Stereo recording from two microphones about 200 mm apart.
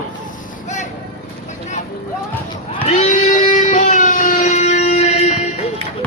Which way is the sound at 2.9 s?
35° left (ahead or behind).